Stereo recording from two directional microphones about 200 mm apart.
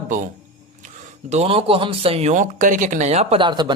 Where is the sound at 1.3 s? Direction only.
30° right (ahead or behind).